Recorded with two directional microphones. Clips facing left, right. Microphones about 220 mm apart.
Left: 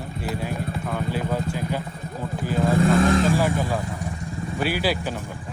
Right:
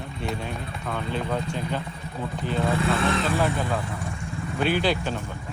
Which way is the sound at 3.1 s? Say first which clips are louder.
Left 6 dB; 45° left (ahead or behind).